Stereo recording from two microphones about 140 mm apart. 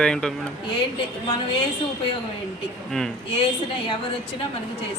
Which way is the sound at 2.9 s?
5° left (ahead or behind).